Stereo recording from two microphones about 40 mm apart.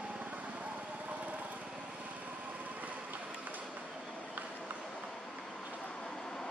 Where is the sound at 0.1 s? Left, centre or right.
Right.